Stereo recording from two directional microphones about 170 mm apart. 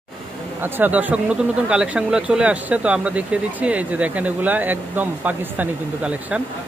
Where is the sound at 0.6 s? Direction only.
10° right (ahead or behind).